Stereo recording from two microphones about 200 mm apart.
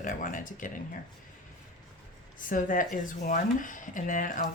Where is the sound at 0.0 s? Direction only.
40° left (ahead or behind).